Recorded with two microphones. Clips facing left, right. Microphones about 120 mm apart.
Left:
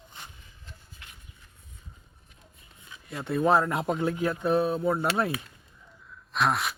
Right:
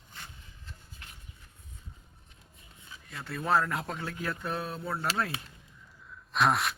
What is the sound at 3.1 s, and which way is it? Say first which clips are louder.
Speech: left 6 dB; 20° left (ahead or behind).